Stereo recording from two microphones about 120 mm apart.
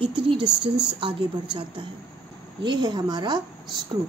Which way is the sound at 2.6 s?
40° right (ahead or behind).